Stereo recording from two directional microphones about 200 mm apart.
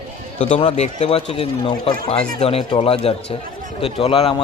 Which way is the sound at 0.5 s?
30° left (ahead or behind).